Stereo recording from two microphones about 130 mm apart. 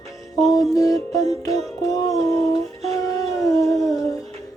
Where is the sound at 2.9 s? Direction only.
25° left (ahead or behind).